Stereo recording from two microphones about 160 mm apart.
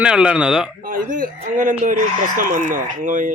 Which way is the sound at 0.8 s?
60° right (ahead or behind).